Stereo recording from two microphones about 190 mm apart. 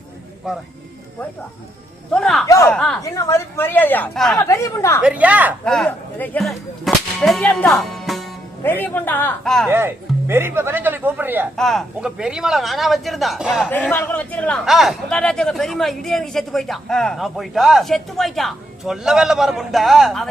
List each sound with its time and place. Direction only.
0.4 s a man's voice: 5° right (ahead or behind)
2.1 s a man's voice: 5° left (ahead or behind)
3.0 s a woman's voice: 15° left (ahead or behind)
4.4 s a woman's voice: 15° left (ahead or behind)
5.0 s speech: 5° right (ahead or behind)
5.6 s whip: 5° left (ahead or behind)
8.6 s a woman's voice: 10° left (ahead or behind)
9.6 s speech: 10° right (ahead or behind)
11.5 s a man's voice: centre (ahead or behind)